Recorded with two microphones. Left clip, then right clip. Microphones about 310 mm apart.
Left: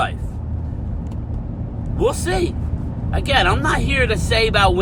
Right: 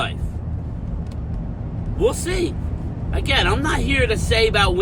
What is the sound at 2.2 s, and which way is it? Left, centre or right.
Speech, centre.